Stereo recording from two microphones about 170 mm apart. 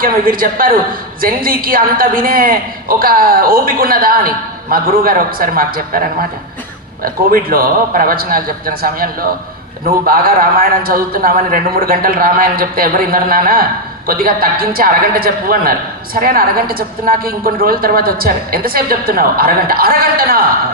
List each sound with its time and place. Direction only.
0.0 s a woman's voice: 55° right (ahead or behind)